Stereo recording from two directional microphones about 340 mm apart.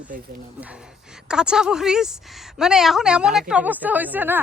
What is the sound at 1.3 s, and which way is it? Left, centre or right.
A woman's voice, centre.